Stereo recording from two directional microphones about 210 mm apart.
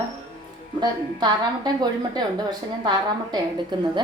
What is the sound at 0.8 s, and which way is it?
Speech, 20° right (ahead or behind).